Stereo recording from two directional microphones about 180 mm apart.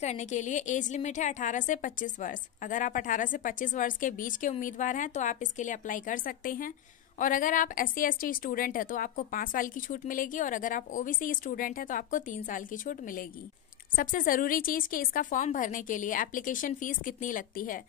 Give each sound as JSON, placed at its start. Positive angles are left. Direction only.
{"t": 0.0, "sound": "a woman's voice", "side_deg": 40}